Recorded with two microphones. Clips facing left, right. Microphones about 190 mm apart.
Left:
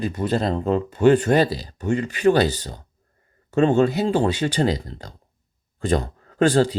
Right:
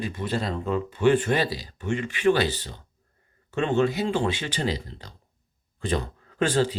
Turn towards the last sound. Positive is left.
turn(degrees=45)  # may be behind; listen again after turning